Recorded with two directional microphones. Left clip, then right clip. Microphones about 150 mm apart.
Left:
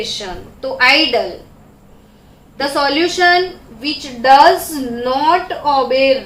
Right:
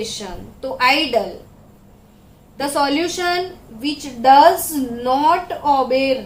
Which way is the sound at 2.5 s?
35° right (ahead or behind).